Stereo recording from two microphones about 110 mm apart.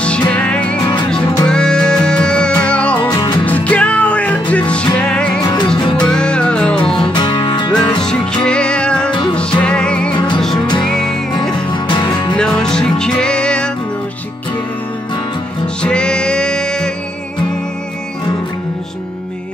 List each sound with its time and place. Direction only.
0.3 s music: 10° left (ahead or behind)
3.1 s music: 40° left (ahead or behind)
3.4 s music: 10° left (ahead or behind)
5.4 s music: 40° left (ahead or behind)
6.0 s music: 10° left (ahead or behind)
7.0 s music: 50° left (ahead or behind)
8.0 s music: 5° left (ahead or behind)
10.1 s music: 45° left (ahead or behind)
10.9 s music: 5° left (ahead or behind)
11.5 s music: 45° left (ahead or behind)
12.4 s music: 5° left (ahead or behind)
15.6 s music: 10° left (ahead or behind)